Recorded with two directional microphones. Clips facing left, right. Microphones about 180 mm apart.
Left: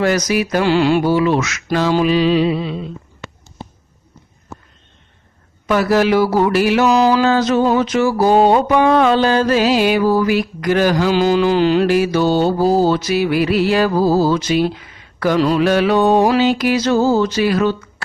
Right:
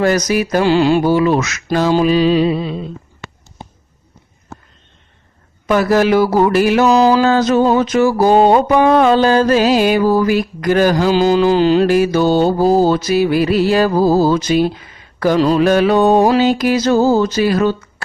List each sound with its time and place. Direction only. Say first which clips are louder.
0.0 s mantra: right 2 dB; 40° right (ahead or behind)
1.0 s mantra: right 2 dB; 45° right (ahead or behind)
5.6 s mantra: right 2 dB; 45° right (ahead or behind)